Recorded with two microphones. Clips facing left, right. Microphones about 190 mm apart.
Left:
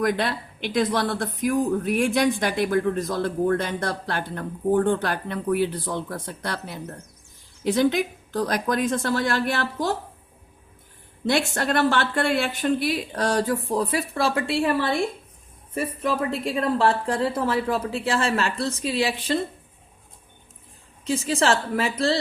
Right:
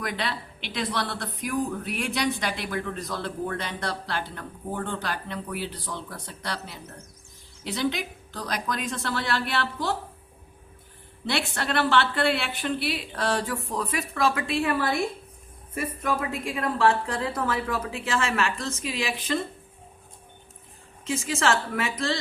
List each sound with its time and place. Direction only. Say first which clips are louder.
0.0 s a woman's voice: left 7 dB; 45° left (ahead or behind)
11.3 s a woman's voice: left 6 dB; 45° left (ahead or behind); by 14.9 s 25° left (ahead or behind)
16.3 s speech: left 5 dB; 35° left (ahead or behind)
21.0 s speech: left 4 dB; 35° left (ahead or behind)